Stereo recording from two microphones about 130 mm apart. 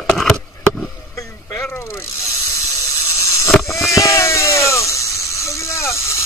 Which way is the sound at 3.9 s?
25° left (ahead or behind).